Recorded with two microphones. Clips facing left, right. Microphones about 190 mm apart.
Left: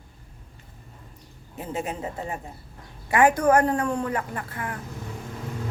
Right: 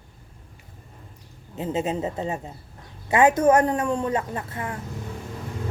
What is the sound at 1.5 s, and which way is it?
A woman's voice, 20° right (ahead or behind).